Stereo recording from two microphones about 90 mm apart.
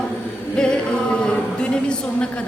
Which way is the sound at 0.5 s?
10° left (ahead or behind).